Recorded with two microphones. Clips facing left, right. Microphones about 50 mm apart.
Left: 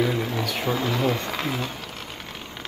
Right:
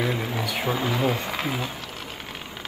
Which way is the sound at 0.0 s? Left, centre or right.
Centre.